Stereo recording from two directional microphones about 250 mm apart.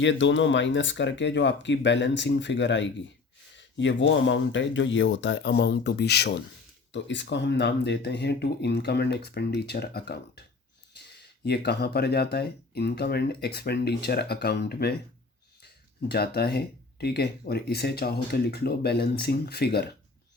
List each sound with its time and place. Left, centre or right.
0.0 s speech: left
11.4 s speech: left